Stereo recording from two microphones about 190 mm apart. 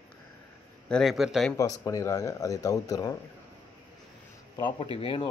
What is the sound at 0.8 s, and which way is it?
Speech, centre (ahead or behind).